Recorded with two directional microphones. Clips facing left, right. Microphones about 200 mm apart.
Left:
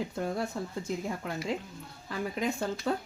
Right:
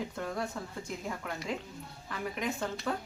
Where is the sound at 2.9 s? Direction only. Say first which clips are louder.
Left 4 dB; 30° left (ahead or behind).